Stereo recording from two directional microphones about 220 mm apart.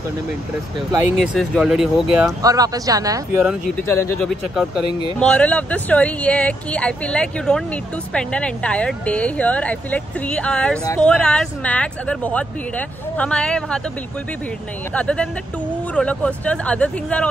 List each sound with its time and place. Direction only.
1.1 s speech: centre (ahead or behind)
2.4 s speech: 15° right (ahead or behind)
3.4 s speech: 5° left (ahead or behind)
4.2 s speech: centre (ahead or behind)
15.0 s speech: 5° left (ahead or behind)